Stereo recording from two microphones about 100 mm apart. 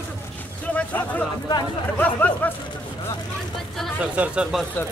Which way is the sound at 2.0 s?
15° left (ahead or behind).